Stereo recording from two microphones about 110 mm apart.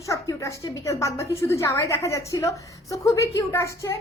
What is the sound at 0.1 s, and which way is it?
A woman's voice, 30° left (ahead or behind).